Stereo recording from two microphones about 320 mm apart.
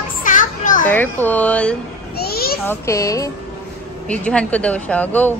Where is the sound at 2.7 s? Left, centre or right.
Centre.